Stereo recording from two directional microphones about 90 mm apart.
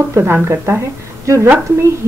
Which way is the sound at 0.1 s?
25° right (ahead or behind).